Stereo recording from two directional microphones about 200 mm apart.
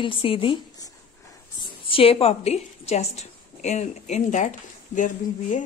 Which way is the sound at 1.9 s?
30° left (ahead or behind).